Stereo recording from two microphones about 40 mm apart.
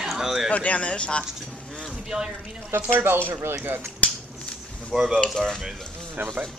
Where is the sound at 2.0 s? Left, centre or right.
Centre.